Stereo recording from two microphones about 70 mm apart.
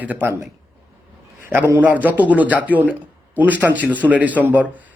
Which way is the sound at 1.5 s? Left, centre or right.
Right.